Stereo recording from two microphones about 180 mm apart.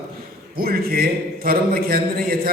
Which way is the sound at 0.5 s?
55° right (ahead or behind).